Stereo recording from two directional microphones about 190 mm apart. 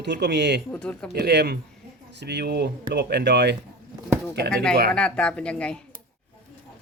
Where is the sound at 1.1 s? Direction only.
60° right (ahead or behind).